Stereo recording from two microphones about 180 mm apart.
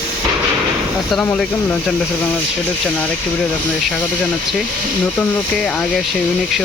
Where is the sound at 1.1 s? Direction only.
5° left (ahead or behind).